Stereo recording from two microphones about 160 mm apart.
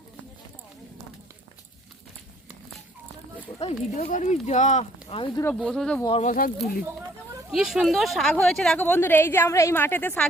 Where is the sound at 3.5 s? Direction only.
30° left (ahead or behind).